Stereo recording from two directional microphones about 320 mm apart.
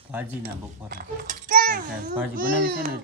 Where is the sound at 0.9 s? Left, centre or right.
Right.